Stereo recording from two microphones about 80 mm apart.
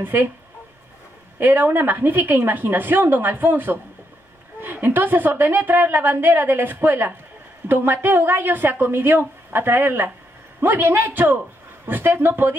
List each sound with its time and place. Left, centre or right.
0.0 s a woman's voice: right
1.4 s a woman's voice: right